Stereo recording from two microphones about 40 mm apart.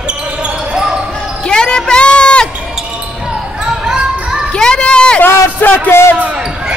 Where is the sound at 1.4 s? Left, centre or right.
Left.